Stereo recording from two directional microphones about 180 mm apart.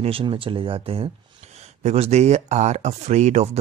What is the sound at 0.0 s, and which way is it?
Speech, 30° right (ahead or behind).